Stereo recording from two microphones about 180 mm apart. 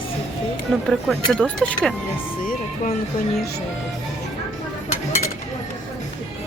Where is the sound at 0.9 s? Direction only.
Centre (ahead or behind).